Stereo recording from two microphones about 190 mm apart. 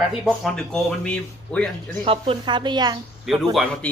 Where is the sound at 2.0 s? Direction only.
30° right (ahead or behind).